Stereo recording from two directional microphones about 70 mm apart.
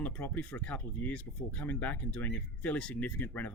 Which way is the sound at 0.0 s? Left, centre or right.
Left.